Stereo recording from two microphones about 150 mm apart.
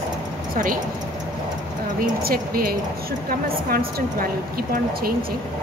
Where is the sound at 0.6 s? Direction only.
65° right (ahead or behind).